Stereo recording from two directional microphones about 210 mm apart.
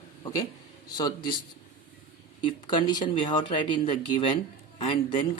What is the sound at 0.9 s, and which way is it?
Speech, 20° left (ahead or behind).